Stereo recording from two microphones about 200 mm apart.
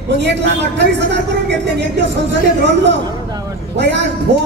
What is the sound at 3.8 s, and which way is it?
Speech, 60° right (ahead or behind).